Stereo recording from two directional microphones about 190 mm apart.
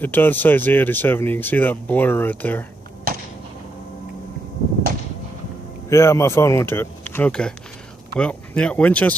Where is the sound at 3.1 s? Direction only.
50° right (ahead or behind).